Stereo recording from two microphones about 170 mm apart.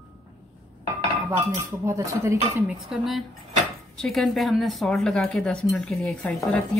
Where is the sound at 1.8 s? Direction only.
15° right (ahead or behind).